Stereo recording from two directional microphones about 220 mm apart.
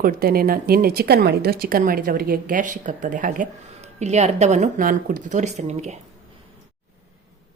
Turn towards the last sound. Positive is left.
turn(degrees=-30)  # may be behind; listen again after turning